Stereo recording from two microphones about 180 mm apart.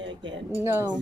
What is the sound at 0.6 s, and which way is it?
Speech, 15° right (ahead or behind).